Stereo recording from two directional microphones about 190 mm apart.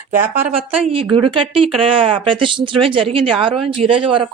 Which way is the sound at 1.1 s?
25° right (ahead or behind).